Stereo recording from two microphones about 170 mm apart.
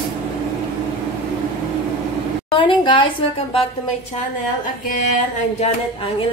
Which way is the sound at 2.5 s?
30° left (ahead or behind).